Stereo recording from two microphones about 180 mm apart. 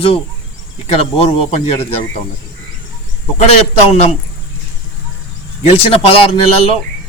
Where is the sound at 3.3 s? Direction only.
35° left (ahead or behind).